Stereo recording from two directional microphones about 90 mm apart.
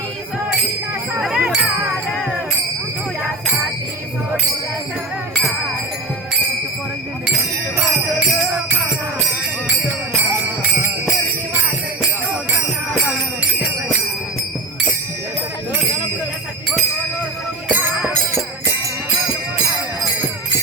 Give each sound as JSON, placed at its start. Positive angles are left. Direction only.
{"t": 1.2, "sound": "music", "side_deg": -5}
{"t": 5.3, "sound": "music", "side_deg": 0}
{"t": 10.6, "sound": "jingle bell", "side_deg": -20}